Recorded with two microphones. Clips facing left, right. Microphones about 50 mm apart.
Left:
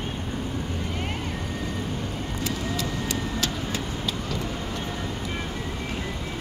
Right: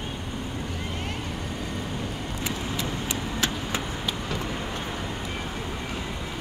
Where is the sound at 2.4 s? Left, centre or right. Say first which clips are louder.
Left 1 dB; right.